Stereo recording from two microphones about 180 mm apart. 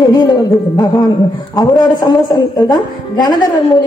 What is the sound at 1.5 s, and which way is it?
A woman's voice, 20° left (ahead or behind).